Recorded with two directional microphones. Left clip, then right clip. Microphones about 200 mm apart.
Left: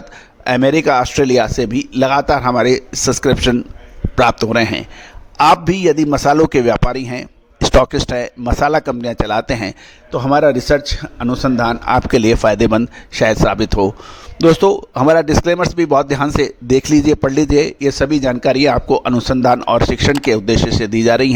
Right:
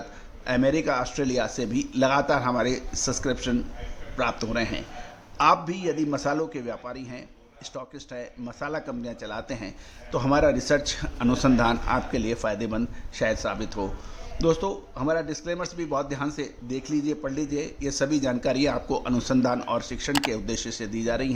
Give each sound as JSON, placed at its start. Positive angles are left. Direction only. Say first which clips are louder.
{"t": 0.4, "sound": "a man's voice", "louder": "left 11 dB", "side_deg": 55}
{"t": 10.1, "sound": "a man's voice", "louder": "left 10 dB", "side_deg": 35}
{"t": 11.9, "sound": "a man's voice", "louder": "left 15 dB", "side_deg": 55}